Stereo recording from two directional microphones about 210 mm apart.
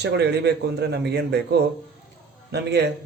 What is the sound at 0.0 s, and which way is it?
Speech, 55° right (ahead or behind).